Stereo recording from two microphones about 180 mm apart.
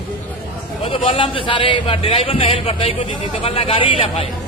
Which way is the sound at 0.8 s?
30° left (ahead or behind).